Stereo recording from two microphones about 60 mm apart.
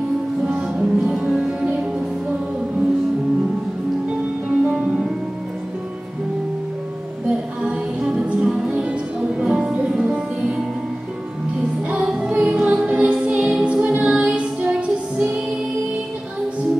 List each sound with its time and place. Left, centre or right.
0.5 s music: centre
4.5 s music: right
7.2 s music: centre
12.1 s music: centre